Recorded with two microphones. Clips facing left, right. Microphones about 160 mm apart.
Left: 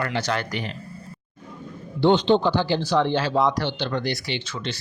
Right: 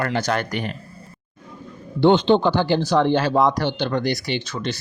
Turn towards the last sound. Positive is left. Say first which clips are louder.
# right 4 dB
turn(degrees=-40)  # may be behind; listen again after turning